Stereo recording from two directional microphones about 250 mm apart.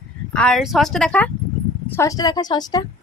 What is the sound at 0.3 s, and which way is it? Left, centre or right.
Speech, centre.